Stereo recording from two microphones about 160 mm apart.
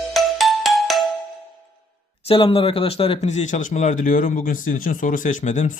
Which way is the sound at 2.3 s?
35° left (ahead or behind).